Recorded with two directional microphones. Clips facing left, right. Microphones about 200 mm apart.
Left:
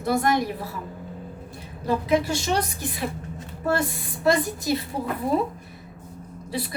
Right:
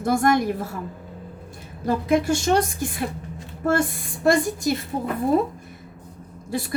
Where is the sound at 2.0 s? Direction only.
50° right (ahead or behind).